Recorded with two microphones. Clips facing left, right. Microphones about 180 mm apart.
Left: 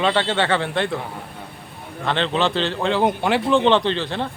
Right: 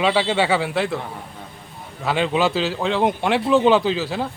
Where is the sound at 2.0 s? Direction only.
5° right (ahead or behind).